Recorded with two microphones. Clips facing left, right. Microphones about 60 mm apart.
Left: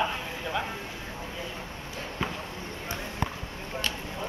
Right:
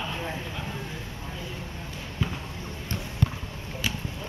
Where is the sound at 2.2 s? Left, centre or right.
Left.